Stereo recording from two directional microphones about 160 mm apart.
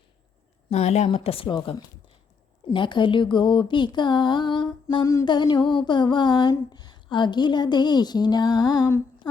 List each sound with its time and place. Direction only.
0.7 s speech: 45° left (ahead or behind); by 9.3 s 25° left (ahead or behind)